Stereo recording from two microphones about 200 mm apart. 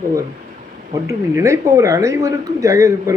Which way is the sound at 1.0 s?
15° right (ahead or behind).